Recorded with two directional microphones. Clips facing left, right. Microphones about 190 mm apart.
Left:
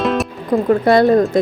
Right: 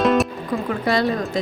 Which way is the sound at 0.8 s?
55° left (ahead or behind).